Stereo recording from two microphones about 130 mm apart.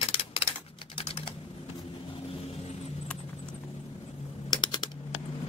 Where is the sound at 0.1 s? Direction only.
45° left (ahead or behind).